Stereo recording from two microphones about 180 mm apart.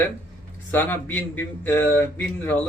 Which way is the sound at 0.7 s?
10° left (ahead or behind).